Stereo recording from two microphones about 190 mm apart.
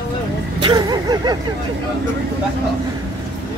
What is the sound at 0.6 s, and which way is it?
Vehicle, 25° right (ahead or behind).